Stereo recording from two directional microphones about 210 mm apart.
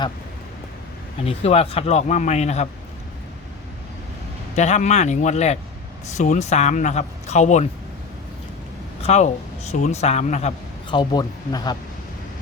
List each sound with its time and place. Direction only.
1.2 s a man's voice: 30° left (ahead or behind)
4.5 s a man's voice: 35° left (ahead or behind)
9.0 s a man's voice: 30° left (ahead or behind)
10.8 s speech: 20° left (ahead or behind)